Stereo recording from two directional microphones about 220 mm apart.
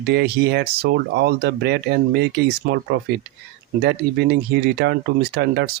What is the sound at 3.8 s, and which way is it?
Speech, 45° right (ahead or behind).